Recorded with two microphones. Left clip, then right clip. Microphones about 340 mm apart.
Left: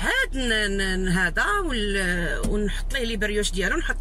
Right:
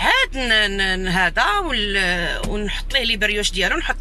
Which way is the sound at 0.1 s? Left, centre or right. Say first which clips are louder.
Right 3 dB; right.